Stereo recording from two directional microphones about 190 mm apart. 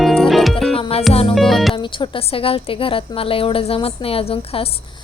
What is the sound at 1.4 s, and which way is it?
Music, centre (ahead or behind).